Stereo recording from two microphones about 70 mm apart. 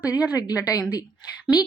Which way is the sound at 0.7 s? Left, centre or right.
Left.